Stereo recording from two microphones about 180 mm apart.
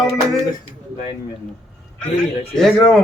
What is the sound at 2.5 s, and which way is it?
Speech, centre (ahead or behind).